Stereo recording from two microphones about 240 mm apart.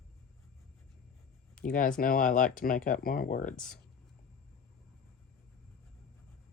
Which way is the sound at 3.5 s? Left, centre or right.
Centre.